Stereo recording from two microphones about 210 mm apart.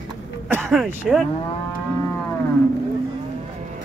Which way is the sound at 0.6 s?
Centre (ahead or behind).